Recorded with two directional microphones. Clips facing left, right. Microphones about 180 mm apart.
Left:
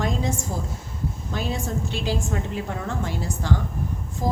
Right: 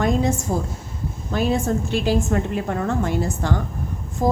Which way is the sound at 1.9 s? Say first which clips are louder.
Right 7 dB; 55° right (ahead or behind).